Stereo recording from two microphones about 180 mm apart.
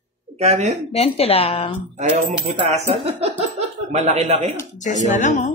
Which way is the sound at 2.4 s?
40° right (ahead or behind).